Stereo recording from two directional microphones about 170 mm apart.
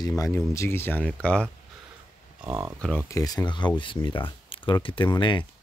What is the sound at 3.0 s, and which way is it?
Speech, 20° left (ahead or behind).